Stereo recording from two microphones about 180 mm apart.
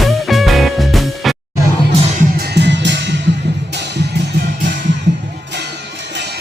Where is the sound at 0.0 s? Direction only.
Centre (ahead or behind).